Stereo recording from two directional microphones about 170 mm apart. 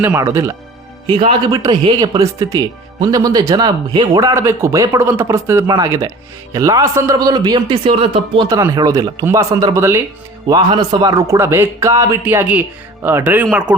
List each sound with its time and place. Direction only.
0.0 s a man's voice: 15° right (ahead or behind)
1.1 s speech: 35° right (ahead or behind)
1.5 s speech: 20° right (ahead or behind)
8.4 s a man's voice: 20° right (ahead or behind)